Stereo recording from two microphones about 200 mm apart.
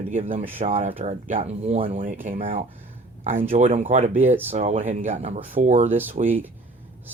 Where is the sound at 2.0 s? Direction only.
40° right (ahead or behind).